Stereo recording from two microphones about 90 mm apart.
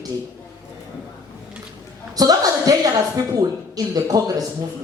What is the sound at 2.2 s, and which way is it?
A woman's voice, 45° right (ahead or behind).